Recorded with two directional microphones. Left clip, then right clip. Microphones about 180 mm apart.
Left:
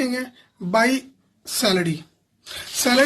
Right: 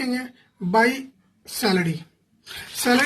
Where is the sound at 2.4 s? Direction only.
35° left (ahead or behind).